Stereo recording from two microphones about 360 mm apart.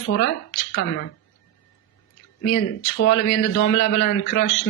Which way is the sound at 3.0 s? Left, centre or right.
Left.